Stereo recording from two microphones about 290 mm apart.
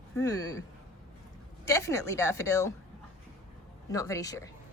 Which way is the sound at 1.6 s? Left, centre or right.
Centre.